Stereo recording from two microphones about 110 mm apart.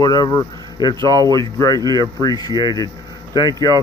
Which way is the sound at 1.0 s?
40° right (ahead or behind).